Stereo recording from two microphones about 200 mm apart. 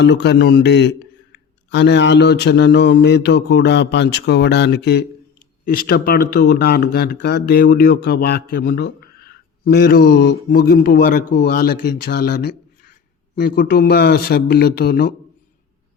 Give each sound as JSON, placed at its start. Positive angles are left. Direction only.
{"t": 0.0, "sound": "a man's voice", "side_deg": 60}
{"t": 5.6, "sound": "speech", "side_deg": 45}